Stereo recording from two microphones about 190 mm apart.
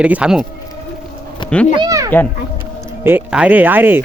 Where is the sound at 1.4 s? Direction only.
25° left (ahead or behind).